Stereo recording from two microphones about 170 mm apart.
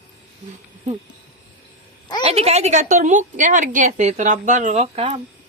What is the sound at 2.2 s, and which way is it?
A woman's voice, 35° right (ahead or behind).